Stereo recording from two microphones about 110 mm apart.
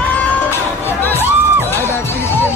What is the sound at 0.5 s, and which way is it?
Music, 20° left (ahead or behind).